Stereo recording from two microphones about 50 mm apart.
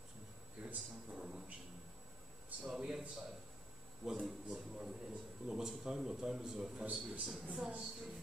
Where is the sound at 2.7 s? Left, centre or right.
Centre.